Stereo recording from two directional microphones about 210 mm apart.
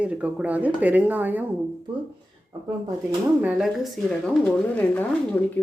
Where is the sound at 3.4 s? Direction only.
5° right (ahead or behind).